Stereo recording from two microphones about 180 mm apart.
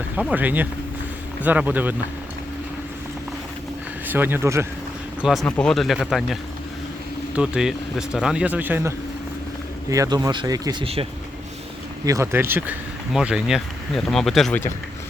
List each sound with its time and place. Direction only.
0.2 s speech: 10° right (ahead or behind)
4.0 s speech: 10° right (ahead or behind)
5.2 s speech: centre (ahead or behind)
9.9 s speech: 20° right (ahead or behind)
12.0 s speech: 15° right (ahead or behind); by 14.6 s centre (ahead or behind)